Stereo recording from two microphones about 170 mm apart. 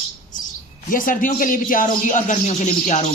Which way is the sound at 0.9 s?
55° left (ahead or behind).